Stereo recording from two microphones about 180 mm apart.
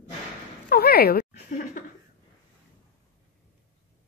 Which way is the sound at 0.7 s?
60° left (ahead or behind).